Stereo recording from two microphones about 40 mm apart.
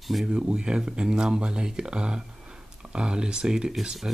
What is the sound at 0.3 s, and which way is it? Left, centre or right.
Speech, right.